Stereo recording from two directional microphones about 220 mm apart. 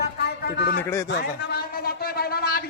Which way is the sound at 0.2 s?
45° left (ahead or behind).